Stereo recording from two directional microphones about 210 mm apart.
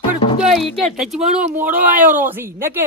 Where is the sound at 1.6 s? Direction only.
40° right (ahead or behind).